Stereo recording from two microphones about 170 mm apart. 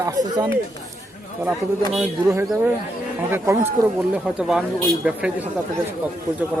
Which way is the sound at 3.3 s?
15° right (ahead or behind).